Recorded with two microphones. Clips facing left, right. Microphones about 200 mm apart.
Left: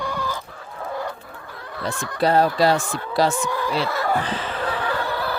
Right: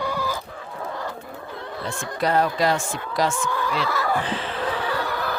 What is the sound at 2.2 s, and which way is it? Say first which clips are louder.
Speech: left 3 dB; 30° left (ahead or behind).